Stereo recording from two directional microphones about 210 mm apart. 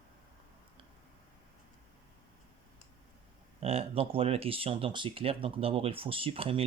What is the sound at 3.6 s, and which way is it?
Speech, 30° right (ahead or behind).